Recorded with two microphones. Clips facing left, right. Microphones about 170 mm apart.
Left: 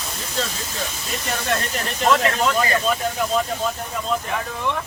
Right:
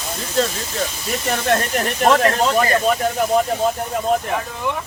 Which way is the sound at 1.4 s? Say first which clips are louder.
Right 7 dB; 55° right (ahead or behind).